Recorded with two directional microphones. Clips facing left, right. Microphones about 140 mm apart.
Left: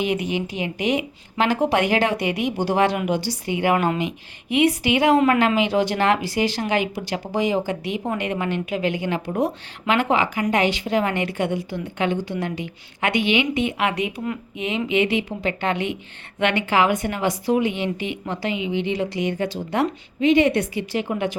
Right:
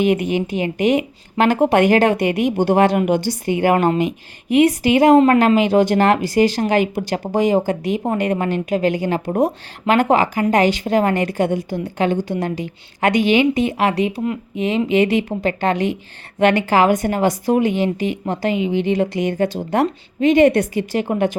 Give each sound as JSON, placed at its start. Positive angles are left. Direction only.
{"t": 0.0, "sound": "a woman's voice", "side_deg": -50}